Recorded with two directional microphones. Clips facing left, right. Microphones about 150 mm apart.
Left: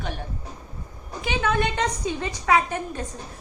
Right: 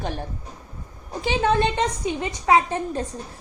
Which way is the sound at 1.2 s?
35° right (ahead or behind).